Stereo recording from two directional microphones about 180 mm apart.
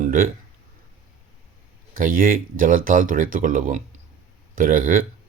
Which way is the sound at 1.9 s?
50° right (ahead or behind).